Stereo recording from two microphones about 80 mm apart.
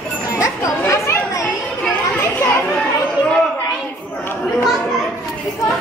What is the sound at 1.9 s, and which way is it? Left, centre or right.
Children playing, left.